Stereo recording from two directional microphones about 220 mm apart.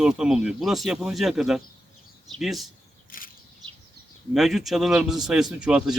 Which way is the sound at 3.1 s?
40° left (ahead or behind).